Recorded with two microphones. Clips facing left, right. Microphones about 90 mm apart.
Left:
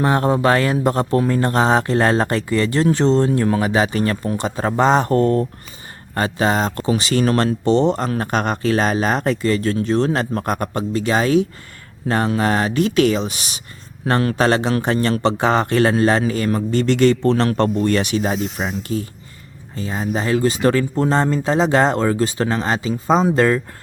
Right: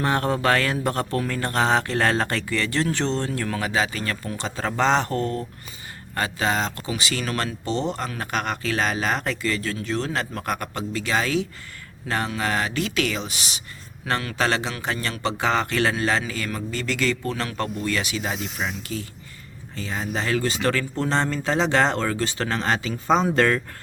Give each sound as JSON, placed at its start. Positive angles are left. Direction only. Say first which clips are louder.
{"t": 0.0, "sound": "speech", "louder": "left 6 dB", "side_deg": 20}
{"t": 4.4, "sound": "speech", "louder": "left 4 dB", "side_deg": 15}
{"t": 5.0, "sound": "speech", "louder": "left 10 dB", "side_deg": 35}
{"t": 7.9, "sound": "speech", "louder": "left 7 dB", "side_deg": 35}
{"t": 15.3, "sound": "speech", "louder": "left 3 dB", "side_deg": 25}
{"t": 17.7, "sound": "speech", "louder": "left 9 dB", "side_deg": 45}
{"t": 23.0, "sound": "speech", "louder": "left 4 dB", "side_deg": 5}
{"t": 23.3, "sound": "speech", "louder": "left 4 dB", "side_deg": 20}